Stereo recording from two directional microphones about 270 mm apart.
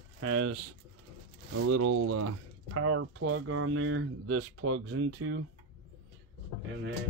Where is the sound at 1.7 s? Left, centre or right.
Right.